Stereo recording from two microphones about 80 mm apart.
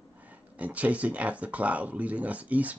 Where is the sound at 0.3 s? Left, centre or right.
Centre.